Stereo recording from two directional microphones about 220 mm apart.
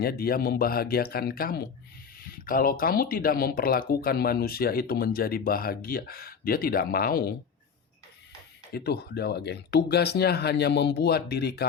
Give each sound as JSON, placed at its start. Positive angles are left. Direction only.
{"t": 0.0, "sound": "speech", "side_deg": 45}
{"t": 8.7, "sound": "speech", "side_deg": 45}